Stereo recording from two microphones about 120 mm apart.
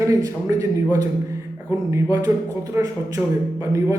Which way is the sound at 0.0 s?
25° right (ahead or behind).